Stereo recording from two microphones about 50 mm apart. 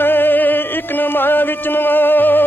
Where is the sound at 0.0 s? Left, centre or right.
Left.